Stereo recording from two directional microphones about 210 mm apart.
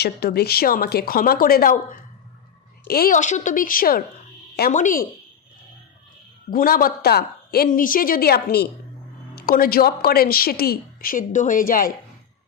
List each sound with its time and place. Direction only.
0.0 s a woman's voice: 50° left (ahead or behind)
6.5 s a woman's voice: 40° left (ahead or behind)